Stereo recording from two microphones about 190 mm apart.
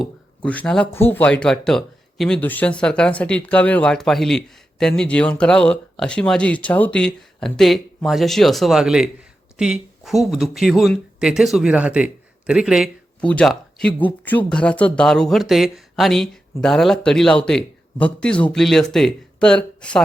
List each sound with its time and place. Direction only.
0.0 s speech: 5° left (ahead or behind)